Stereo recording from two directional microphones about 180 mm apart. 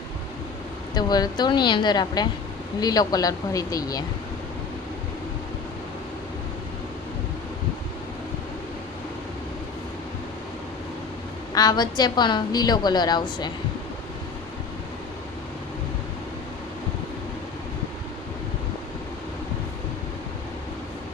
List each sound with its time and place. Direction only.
0.9 s a woman's voice: 20° left (ahead or behind)
11.5 s a woman's voice: 20° left (ahead or behind)